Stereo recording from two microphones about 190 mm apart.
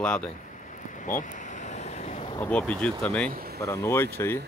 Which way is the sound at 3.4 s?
55° right (ahead or behind).